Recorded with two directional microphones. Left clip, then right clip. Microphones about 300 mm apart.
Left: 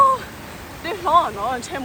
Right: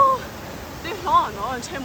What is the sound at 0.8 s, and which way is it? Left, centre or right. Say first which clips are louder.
Speech: left 2 dB; centre.